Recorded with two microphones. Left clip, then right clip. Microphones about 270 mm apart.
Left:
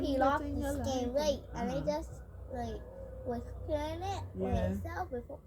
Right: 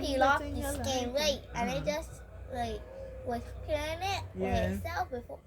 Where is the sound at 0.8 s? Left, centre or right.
Centre.